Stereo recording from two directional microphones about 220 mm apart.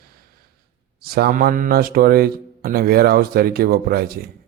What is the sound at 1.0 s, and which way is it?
A man's voice, 45° right (ahead or behind).